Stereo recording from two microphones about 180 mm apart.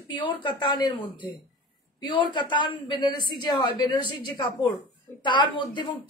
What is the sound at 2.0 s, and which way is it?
A woman's voice, 25° left (ahead or behind).